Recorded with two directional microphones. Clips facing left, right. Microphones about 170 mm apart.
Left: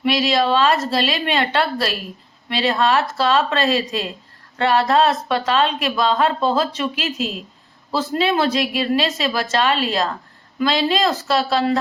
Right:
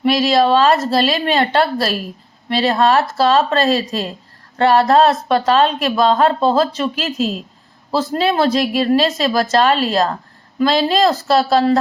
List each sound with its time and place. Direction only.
0.0 s a woman's voice: 40° right (ahead or behind)